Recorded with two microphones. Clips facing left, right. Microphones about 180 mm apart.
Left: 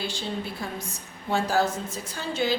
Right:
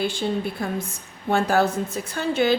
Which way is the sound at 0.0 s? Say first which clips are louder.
Right 7 dB; 55° right (ahead or behind).